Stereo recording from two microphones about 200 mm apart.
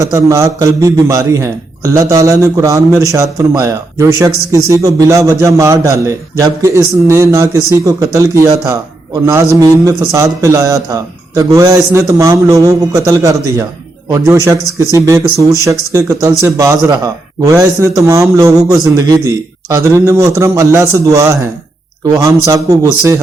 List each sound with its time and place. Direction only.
0.0 s speech: 15° right (ahead or behind)